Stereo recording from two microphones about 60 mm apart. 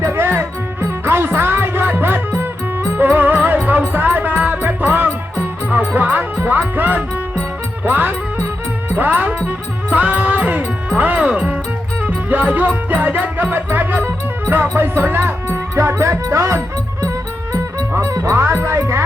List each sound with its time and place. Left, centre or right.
0.0 s music: right
5.9 s speech: right
6.4 s music: right
9.0 s speech: right
9.9 s music: right
10.9 s speech: right
12.0 s music: right
15.4 s music: right